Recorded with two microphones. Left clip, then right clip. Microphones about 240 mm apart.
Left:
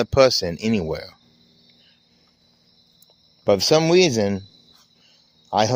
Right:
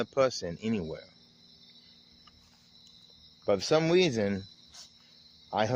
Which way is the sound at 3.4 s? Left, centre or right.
Left.